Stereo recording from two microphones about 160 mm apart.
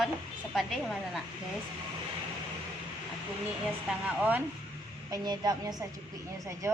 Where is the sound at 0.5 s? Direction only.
Centre (ahead or behind).